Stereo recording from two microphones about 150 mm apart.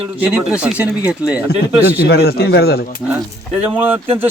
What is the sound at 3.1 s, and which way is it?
Speech, 10° right (ahead or behind).